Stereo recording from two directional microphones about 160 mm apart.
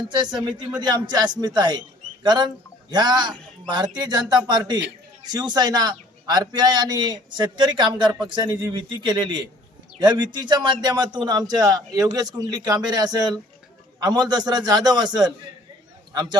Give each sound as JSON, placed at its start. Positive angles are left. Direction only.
{"t": 0.1, "sound": "a man's voice", "side_deg": -30}